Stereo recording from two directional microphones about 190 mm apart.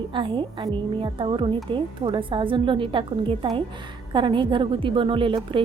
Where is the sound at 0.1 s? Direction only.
25° right (ahead or behind).